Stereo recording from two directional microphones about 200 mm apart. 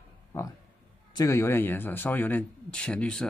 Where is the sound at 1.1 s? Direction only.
15° left (ahead or behind).